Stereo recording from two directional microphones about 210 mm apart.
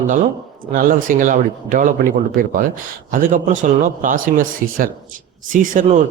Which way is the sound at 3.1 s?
40° right (ahead or behind).